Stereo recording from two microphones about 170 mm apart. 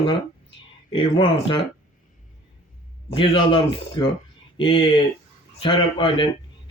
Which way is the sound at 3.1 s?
35° left (ahead or behind).